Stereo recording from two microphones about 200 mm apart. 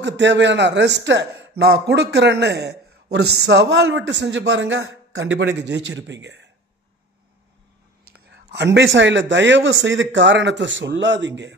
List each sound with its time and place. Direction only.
0.0 s a man's voice: 60° right (ahead or behind)
8.0 s whispering: 60° right (ahead or behind)
8.7 s a man's voice: 65° right (ahead or behind)